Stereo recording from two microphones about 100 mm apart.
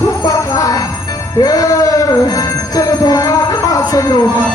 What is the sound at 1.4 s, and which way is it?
Music, 35° left (ahead or behind).